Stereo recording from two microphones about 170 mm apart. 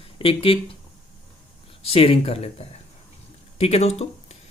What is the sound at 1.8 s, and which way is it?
Speech, 35° left (ahead or behind).